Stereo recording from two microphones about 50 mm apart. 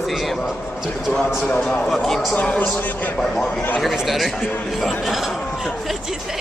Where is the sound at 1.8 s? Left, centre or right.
Centre.